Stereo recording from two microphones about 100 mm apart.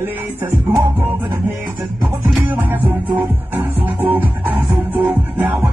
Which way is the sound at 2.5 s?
20° right (ahead or behind).